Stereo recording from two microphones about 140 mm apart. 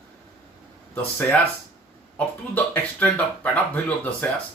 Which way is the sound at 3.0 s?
10° left (ahead or behind).